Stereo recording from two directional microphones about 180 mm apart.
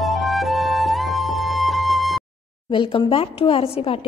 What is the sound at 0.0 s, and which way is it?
Flute, centre (ahead or behind).